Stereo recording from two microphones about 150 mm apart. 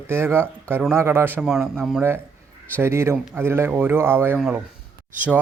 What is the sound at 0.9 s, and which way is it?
A man's voice, 15° right (ahead or behind).